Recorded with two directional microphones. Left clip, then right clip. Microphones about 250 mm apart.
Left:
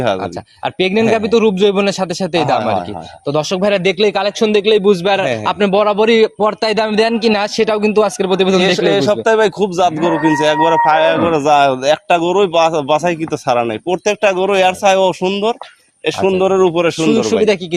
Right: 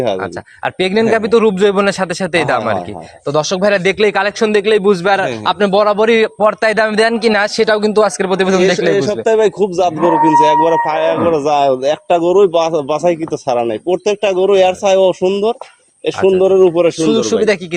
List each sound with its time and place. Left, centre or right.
0.2 s a man's voice: centre
8.9 s speech: left
17.0 s a man's voice: centre